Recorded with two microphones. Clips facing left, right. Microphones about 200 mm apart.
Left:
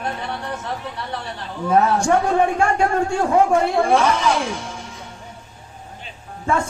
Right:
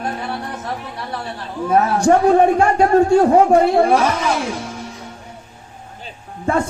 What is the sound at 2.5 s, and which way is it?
A man's voice, 35° right (ahead or behind).